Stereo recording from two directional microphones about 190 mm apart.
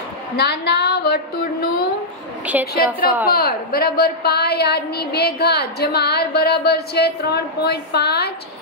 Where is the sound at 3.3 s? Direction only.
50° left (ahead or behind).